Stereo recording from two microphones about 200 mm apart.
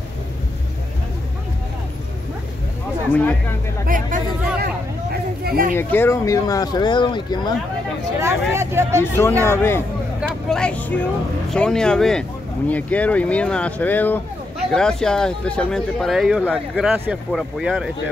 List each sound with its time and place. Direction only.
3.8 s chatter: 45° right (ahead or behind)
5.1 s a sound: 50° right (ahead or behind)
5.8 s speech: 10° left (ahead or behind)
8.2 s speech: 15° right (ahead or behind)
9.0 s speech: 15° left (ahead or behind); by 17.9 s 5° right (ahead or behind)